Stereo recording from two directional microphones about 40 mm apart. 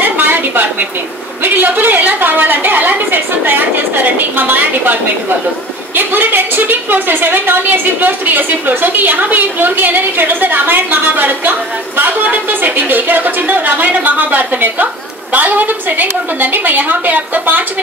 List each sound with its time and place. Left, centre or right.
0.0 s a sound: right
1.4 s a woman's voice: right
5.9 s a woman's voice: right